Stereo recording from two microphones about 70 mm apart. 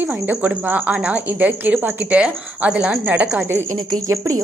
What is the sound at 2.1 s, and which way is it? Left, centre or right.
Speech, centre.